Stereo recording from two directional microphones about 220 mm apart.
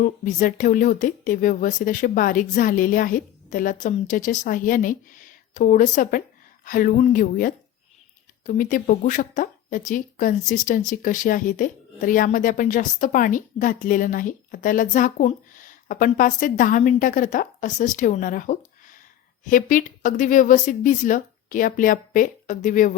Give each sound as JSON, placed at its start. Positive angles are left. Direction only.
{"t": 0.0, "sound": "a woman's voice", "side_deg": 40}